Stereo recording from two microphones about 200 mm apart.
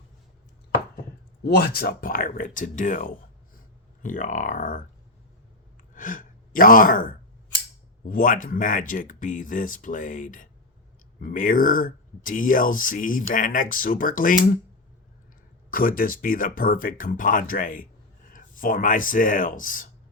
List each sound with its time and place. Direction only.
1.5 s speech: 50° left (ahead or behind)
5.9 s speech: 40° left (ahead or behind)
8.1 s speech: 45° left (ahead or behind)
15.7 s speech: 45° left (ahead or behind)